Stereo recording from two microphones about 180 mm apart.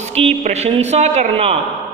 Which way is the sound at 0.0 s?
35° right (ahead or behind).